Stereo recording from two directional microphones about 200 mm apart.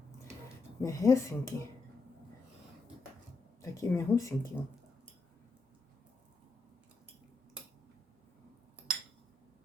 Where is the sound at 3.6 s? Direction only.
15° left (ahead or behind).